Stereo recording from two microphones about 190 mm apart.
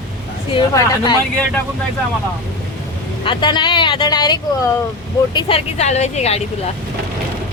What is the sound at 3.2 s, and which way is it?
Speech, 25° left (ahead or behind).